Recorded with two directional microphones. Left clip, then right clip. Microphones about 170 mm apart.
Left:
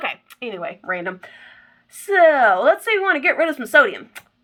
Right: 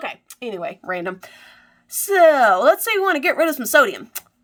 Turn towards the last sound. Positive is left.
turn(degrees=-40)  # may be behind; listen again after turning